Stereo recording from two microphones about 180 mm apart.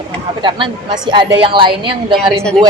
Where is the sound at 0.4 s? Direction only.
25° right (ahead or behind).